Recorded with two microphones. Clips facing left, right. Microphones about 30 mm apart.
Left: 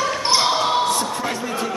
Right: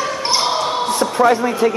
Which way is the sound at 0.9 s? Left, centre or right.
Right.